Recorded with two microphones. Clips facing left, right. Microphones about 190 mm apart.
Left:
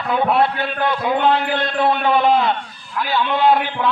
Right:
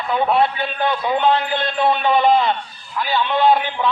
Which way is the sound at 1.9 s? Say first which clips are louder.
Right 1 dB; 5° left (ahead or behind).